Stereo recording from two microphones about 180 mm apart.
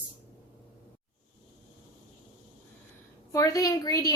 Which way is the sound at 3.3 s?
20° left (ahead or behind).